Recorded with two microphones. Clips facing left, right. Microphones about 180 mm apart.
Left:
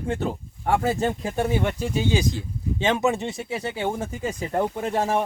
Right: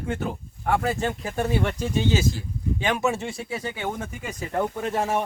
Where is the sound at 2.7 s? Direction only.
25° left (ahead or behind).